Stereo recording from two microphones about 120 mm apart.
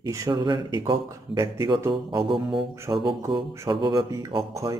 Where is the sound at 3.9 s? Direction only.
30° right (ahead or behind).